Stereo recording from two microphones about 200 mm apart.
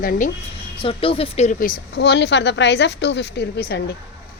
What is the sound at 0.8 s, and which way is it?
A woman's voice, 25° left (ahead or behind).